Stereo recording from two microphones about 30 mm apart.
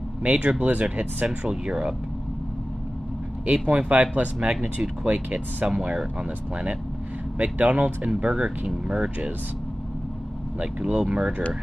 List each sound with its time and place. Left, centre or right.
0.2 s speech: right
1.2 s speech: right
3.4 s speech: right
7.3 s speech: right
10.9 s speech: right